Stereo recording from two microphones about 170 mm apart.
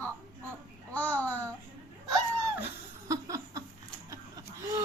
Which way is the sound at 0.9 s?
10° left (ahead or behind).